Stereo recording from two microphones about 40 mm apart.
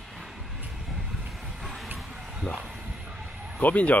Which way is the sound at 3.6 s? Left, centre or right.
Left.